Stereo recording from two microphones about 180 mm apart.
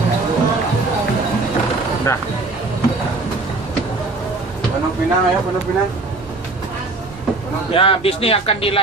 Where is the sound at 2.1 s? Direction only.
15° left (ahead or behind).